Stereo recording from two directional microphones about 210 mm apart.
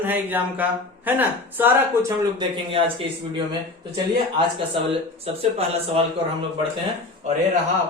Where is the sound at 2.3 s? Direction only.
25° right (ahead or behind).